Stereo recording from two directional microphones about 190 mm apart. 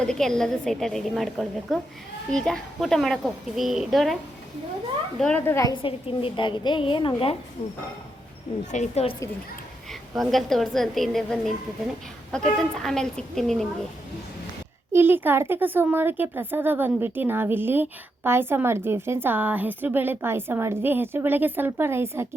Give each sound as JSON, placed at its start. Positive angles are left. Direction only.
{"t": 0.0, "sound": "a woman's voice", "side_deg": 5}
{"t": 5.2, "sound": "a child's voice", "side_deg": 10}
{"t": 5.7, "sound": "a woman's voice", "side_deg": 30}
{"t": 9.9, "sound": "a woman's voice", "side_deg": 0}
{"t": 12.7, "sound": "a woman's voice", "side_deg": 5}
{"t": 14.9, "sound": "speech", "side_deg": -10}